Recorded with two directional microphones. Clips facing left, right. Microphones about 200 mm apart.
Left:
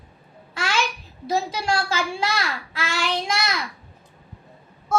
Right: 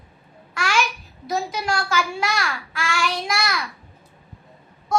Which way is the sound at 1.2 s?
30° left (ahead or behind).